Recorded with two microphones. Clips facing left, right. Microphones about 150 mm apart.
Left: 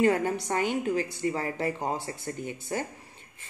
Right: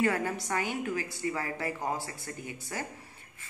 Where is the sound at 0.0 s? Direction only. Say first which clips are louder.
Left 5 dB; 25° left (ahead or behind).